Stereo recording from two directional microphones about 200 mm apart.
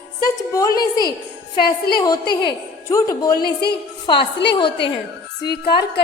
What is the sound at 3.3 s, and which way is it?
Speech, 50° left (ahead or behind).